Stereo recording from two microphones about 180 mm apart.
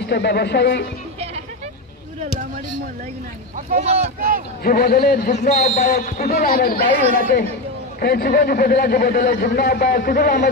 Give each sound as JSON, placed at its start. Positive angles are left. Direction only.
{"t": 0.0, "sound": "a woman's voice", "side_deg": 65}
{"t": 3.7, "sound": "speech", "side_deg": -35}
{"t": 4.6, "sound": "a man's voice", "side_deg": 55}
{"t": 5.6, "sound": "a man's voice", "side_deg": 60}